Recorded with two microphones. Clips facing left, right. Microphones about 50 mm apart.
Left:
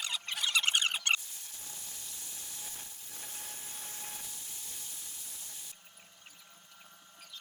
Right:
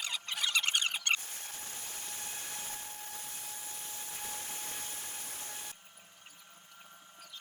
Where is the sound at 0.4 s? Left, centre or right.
Left.